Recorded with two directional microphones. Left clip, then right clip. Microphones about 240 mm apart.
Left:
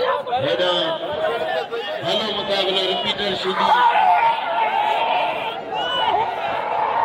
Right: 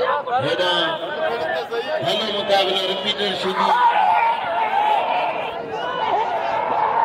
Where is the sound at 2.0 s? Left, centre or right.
Right.